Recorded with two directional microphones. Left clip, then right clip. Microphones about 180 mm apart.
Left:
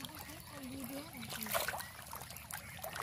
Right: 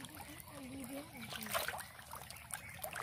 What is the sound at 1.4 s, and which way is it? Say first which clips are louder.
Speech: left 2 dB; 25° left (ahead or behind).